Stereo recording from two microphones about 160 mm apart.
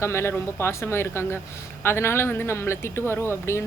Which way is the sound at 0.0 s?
15° left (ahead or behind).